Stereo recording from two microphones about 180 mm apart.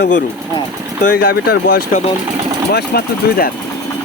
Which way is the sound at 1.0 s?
55° left (ahead or behind).